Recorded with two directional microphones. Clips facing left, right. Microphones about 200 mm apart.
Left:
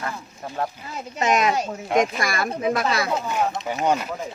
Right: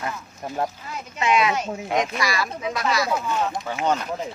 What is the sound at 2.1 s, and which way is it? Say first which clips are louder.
Speech: left 1 dB; 50° left (ahead or behind).